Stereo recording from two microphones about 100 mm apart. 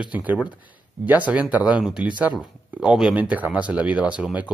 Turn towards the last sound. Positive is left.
turn(degrees=-15)  # may be behind; listen again after turning